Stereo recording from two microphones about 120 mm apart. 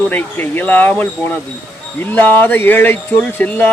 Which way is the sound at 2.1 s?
15° left (ahead or behind).